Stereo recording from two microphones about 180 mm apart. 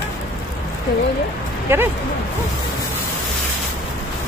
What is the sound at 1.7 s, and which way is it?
Speech, 10° right (ahead or behind).